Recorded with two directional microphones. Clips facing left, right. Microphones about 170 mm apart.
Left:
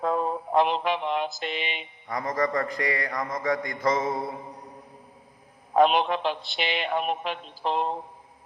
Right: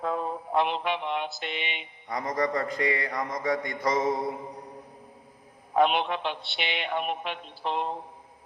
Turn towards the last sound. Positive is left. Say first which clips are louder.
# left 3 dB
turn(degrees=35)  # may be behind; listen again after turning